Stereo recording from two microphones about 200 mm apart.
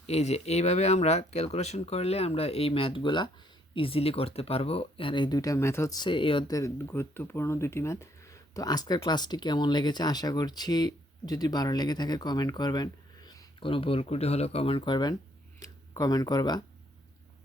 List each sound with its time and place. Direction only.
0.1 s speech: 30° left (ahead or behind)